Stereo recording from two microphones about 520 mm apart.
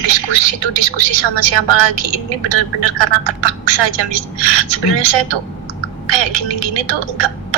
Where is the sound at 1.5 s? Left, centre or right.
Right.